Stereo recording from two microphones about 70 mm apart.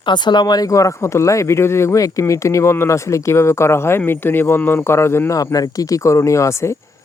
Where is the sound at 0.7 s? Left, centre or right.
Left.